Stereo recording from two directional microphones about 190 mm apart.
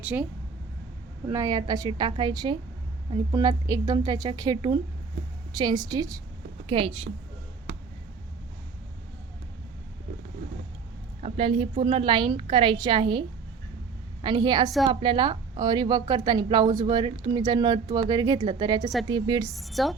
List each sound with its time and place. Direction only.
0.0 s speech: 10° right (ahead or behind)
1.3 s a woman's voice: 15° right (ahead or behind)
11.2 s a woman's voice: 30° right (ahead or behind)
19.5 s a woman's voice: centre (ahead or behind)